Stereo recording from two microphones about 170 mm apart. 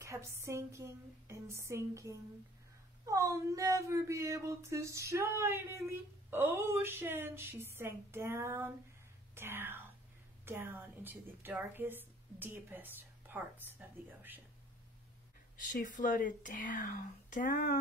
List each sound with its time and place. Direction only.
0.0 s a woman's voice: 15° right (ahead or behind)
15.7 s speech: 50° left (ahead or behind)